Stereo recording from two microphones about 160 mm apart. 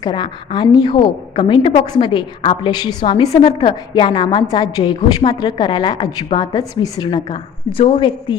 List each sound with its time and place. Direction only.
0.0 s a woman's voice: 25° left (ahead or behind)